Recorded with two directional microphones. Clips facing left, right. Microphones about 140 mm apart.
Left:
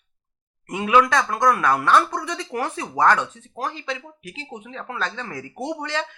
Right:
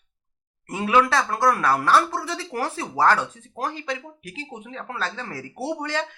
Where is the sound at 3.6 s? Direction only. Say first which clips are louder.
Right 1 dB; 50° right (ahead or behind).